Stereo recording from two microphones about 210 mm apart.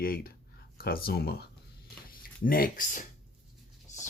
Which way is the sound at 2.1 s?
45° left (ahead or behind).